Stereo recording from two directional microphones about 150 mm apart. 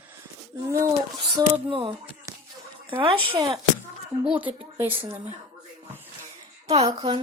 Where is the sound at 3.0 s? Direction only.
35° right (ahead or behind).